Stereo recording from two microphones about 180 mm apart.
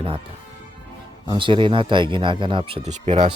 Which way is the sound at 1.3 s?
25° right (ahead or behind).